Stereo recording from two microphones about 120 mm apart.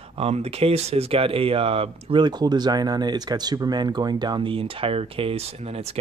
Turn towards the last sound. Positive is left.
turn(degrees=-50)  # may be behind; listen again after turning